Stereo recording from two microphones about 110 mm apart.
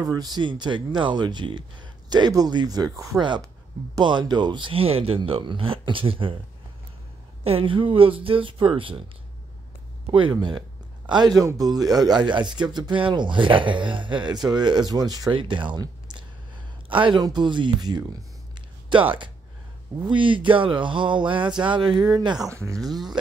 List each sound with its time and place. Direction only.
0.0 s speech: 35° right (ahead or behind)
3.2 s speech: 45° right (ahead or behind)
7.4 s speech: 55° right (ahead or behind)
10.1 s speech: 45° right (ahead or behind)
15.3 s speech: 45° right (ahead or behind)
22.8 s speech: centre (ahead or behind)